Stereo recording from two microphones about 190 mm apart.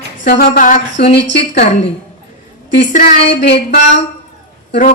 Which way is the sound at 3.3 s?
65° left (ahead or behind).